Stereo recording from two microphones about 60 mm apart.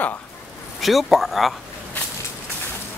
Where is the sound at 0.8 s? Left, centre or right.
Centre.